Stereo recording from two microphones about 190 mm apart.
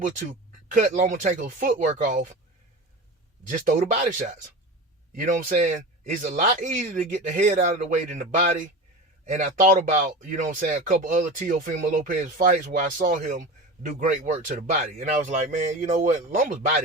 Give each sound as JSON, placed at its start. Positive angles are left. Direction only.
{"t": 0.0, "sound": "speech", "side_deg": -40}
{"t": 3.5, "sound": "speech", "side_deg": -40}